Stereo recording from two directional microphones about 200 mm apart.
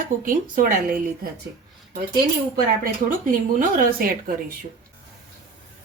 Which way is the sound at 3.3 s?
40° right (ahead or behind).